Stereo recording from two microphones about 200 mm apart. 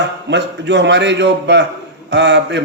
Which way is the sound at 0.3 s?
60° right (ahead or behind).